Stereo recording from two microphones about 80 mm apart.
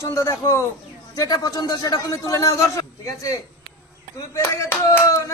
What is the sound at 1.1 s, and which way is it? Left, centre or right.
A man's voice, left.